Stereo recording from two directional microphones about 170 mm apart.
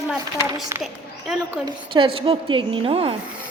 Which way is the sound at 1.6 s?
30° right (ahead or behind).